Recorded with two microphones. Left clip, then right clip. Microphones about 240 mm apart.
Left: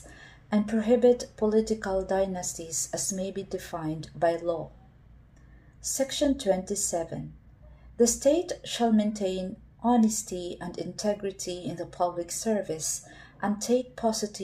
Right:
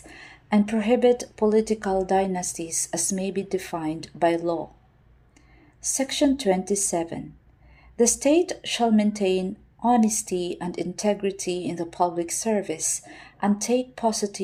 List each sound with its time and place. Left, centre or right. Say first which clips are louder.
0.1 s a woman's voice: right 5 dB; right
5.8 s a woman's voice: right 4 dB; right
8.0 s a woman's voice: right 3 dB; right